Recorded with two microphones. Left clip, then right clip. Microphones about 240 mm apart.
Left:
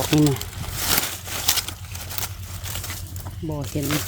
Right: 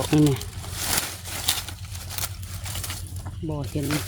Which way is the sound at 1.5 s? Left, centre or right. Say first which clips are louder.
Left 3 dB; centre.